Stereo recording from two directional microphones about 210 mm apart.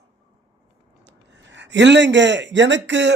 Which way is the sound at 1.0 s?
60° right (ahead or behind).